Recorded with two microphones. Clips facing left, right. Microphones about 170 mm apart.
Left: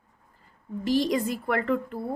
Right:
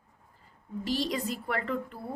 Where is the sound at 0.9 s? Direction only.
50° left (ahead or behind).